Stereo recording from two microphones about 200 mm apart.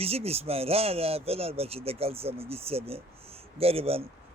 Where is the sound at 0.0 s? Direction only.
30° right (ahead or behind).